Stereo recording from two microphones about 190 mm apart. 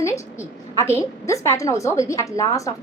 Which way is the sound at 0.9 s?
15° left (ahead or behind).